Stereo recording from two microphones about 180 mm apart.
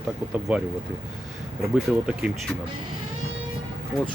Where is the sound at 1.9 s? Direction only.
5° right (ahead or behind).